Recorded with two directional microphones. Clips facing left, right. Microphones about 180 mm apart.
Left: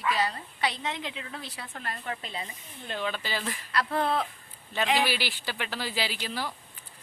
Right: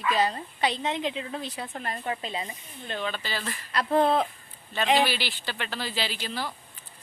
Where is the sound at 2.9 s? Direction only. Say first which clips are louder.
Even; 5° left (ahead or behind).